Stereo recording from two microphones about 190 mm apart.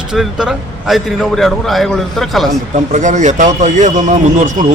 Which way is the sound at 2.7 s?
40° right (ahead or behind).